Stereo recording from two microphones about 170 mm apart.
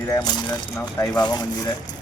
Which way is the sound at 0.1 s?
25° left (ahead or behind).